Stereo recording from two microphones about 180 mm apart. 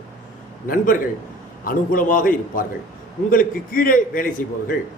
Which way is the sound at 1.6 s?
50° left (ahead or behind).